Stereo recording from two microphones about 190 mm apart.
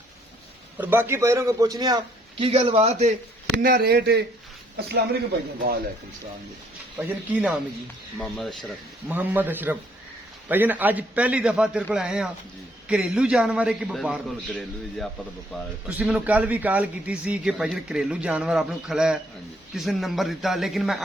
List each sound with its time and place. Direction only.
0.8 s a man's voice: 10° right (ahead or behind)
2.4 s a man's voice: 30° right (ahead or behind)
3.6 s speech: 50° right (ahead or behind)
6.9 s a man's voice: 10° right (ahead or behind)